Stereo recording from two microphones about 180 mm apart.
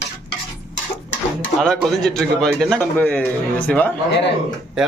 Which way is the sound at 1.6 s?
5° left (ahead or behind).